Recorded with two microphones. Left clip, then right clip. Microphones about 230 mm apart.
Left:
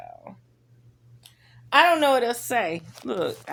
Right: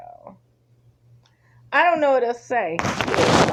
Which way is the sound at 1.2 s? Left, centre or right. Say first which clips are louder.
Left 1 dB; centre.